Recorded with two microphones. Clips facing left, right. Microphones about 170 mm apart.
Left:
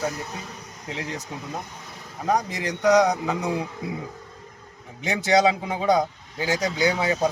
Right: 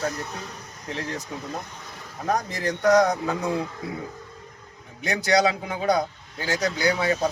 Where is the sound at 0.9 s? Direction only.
15° left (ahead or behind).